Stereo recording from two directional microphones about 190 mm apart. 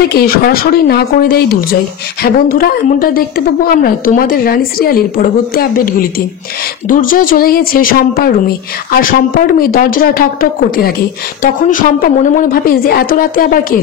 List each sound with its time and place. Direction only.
0.1 s speech: 55° left (ahead or behind)